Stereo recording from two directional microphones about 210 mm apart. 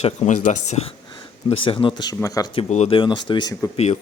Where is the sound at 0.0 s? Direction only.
30° left (ahead or behind).